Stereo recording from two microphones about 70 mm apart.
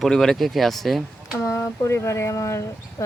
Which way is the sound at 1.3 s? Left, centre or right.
Left.